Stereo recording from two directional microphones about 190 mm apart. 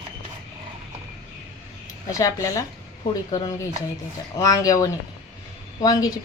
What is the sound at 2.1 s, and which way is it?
Speech, 15° left (ahead or behind).